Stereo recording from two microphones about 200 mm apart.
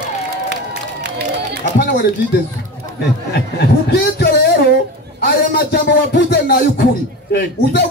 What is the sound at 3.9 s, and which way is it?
Speech, 55° left (ahead or behind).